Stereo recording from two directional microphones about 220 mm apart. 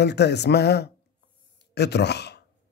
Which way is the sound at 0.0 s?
50° left (ahead or behind).